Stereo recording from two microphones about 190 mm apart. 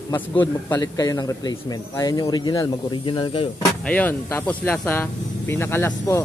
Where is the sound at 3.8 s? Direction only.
10° left (ahead or behind).